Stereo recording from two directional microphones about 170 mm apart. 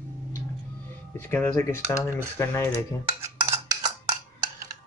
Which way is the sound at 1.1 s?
10° left (ahead or behind).